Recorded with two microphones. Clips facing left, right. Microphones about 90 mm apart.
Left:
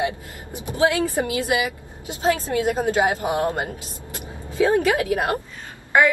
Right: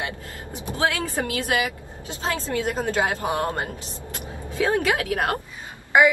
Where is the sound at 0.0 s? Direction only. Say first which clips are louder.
Left 6 dB; 15° left (ahead or behind).